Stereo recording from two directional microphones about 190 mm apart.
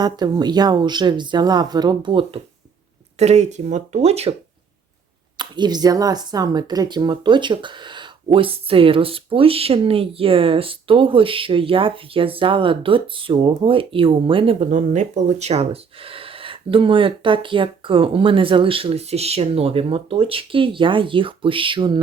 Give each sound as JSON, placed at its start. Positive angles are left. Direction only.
{"t": 0.0, "sound": "speech", "side_deg": -20}
{"t": 3.2, "sound": "speech", "side_deg": -35}
{"t": 5.4, "sound": "speech", "side_deg": -20}